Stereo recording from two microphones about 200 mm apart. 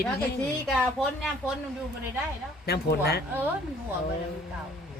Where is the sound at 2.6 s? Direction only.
55° left (ahead or behind).